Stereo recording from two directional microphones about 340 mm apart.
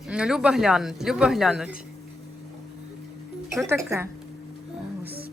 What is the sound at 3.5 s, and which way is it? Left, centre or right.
Speech, centre.